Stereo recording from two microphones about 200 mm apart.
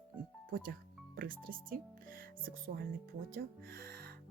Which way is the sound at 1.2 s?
45° right (ahead or behind).